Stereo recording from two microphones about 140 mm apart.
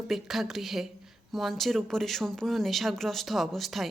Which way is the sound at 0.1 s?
Centre (ahead or behind).